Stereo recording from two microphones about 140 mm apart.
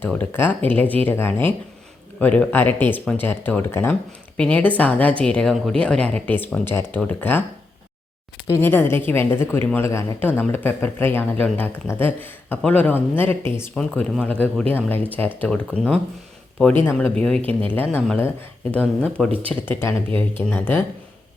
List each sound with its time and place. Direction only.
0.0 s a woman's voice: 15° left (ahead or behind)
8.6 s a woman's voice: 15° left (ahead or behind)